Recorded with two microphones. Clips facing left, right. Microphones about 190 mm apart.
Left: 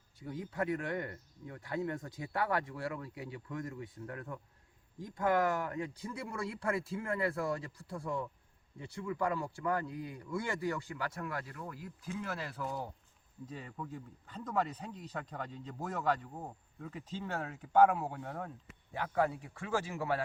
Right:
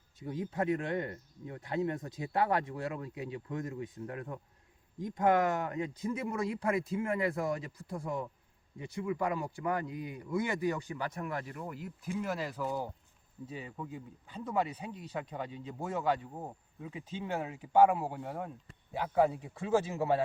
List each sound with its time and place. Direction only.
0.2 s speech: 20° right (ahead or behind)